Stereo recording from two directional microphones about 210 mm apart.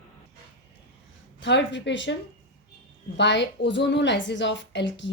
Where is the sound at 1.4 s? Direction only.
55° left (ahead or behind).